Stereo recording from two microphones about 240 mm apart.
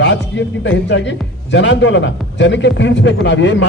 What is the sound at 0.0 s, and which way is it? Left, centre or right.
A man's voice, left.